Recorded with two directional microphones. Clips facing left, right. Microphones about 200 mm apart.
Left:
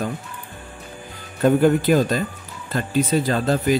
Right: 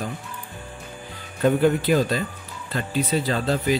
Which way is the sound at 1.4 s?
45° left (ahead or behind).